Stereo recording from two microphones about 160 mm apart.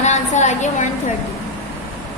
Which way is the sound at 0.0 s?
45° left (ahead or behind).